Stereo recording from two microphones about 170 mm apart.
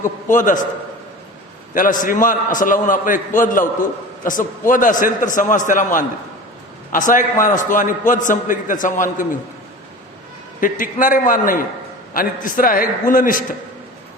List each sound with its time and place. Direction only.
0.0 s a man's voice: 50° left (ahead or behind)
1.7 s a man's voice: 50° left (ahead or behind)
10.6 s a man's voice: 50° left (ahead or behind)